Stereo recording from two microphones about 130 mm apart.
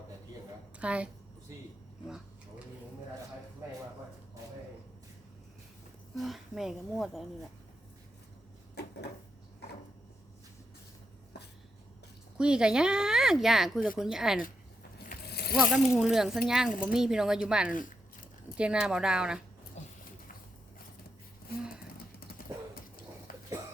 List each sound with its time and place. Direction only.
0.8 s a woman's voice: 10° right (ahead or behind)
6.1 s speech: centre (ahead or behind)
12.4 s speech: 5° right (ahead or behind)
15.5 s a woman's voice: centre (ahead or behind)
19.8 s a sound: 60° left (ahead or behind)